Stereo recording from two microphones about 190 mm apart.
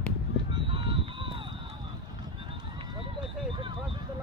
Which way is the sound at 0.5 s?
30° right (ahead or behind).